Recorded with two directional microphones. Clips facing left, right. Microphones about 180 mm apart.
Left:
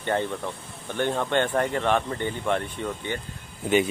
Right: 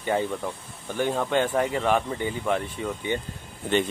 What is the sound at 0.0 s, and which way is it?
Speech, 10° right (ahead or behind).